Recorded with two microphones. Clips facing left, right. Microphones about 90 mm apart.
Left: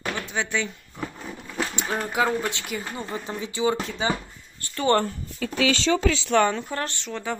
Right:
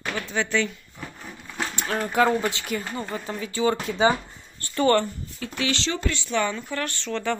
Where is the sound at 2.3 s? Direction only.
Centre (ahead or behind).